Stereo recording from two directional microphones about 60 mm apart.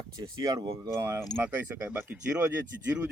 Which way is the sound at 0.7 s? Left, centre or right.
Right.